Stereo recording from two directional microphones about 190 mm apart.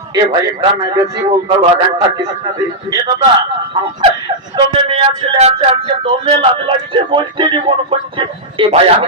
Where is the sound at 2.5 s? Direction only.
20° right (ahead or behind).